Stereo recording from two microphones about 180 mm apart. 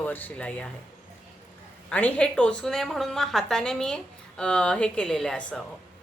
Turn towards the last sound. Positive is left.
turn(degrees=5)  # may be behind; listen again after turning